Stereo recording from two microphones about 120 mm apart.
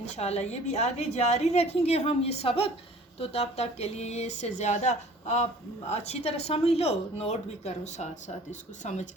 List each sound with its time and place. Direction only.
0.0 s a woman's voice: 65° left (ahead or behind)